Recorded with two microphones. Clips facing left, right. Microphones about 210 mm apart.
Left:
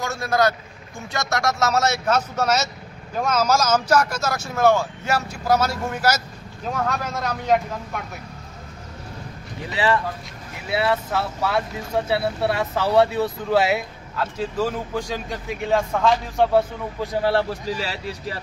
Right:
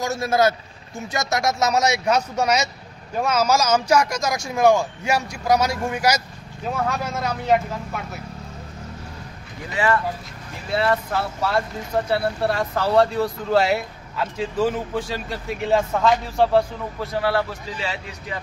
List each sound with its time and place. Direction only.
0.0 s a man's voice: 20° right (ahead or behind); by 8.0 s 5° right (ahead or behind)
10.7 s speech: 5° left (ahead or behind)
17.1 s speech: 25° left (ahead or behind)